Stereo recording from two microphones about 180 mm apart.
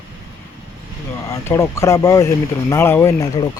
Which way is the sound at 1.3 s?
15° left (ahead or behind).